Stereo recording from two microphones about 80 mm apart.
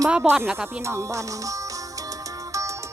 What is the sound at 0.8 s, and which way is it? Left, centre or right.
Music, right.